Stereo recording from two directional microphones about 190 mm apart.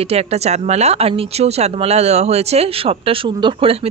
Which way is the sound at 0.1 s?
35° right (ahead or behind).